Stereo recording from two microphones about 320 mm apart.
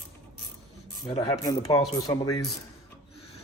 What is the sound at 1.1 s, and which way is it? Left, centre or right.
Speech, centre.